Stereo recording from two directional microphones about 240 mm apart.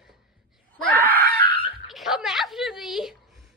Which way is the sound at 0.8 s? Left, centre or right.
Centre.